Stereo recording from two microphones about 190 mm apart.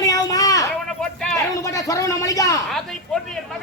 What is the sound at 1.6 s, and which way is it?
Speech, 15° left (ahead or behind).